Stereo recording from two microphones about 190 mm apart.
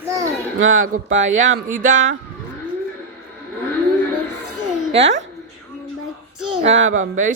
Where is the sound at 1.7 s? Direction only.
45° right (ahead or behind).